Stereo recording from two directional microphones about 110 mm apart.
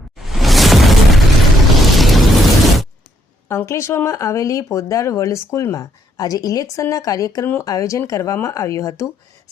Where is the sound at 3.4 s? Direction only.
25° left (ahead or behind).